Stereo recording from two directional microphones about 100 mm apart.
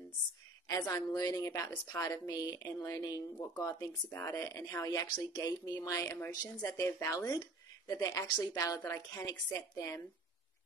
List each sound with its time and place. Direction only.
0.7 s a woman's voice: 35° left (ahead or behind)